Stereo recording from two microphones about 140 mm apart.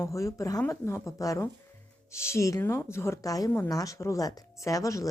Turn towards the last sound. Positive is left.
turn(degrees=25)  # may be behind; listen again after turning